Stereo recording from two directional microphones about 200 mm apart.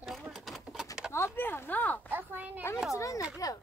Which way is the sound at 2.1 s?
10° right (ahead or behind).